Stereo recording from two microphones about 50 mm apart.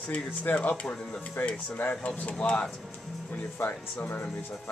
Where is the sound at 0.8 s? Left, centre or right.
Centre.